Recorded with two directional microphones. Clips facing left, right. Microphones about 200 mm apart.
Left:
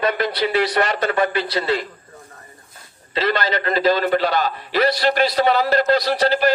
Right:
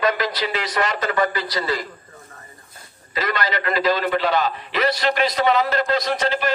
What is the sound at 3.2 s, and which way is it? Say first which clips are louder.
A man's voice: left 3 dB; 30° left (ahead or behind).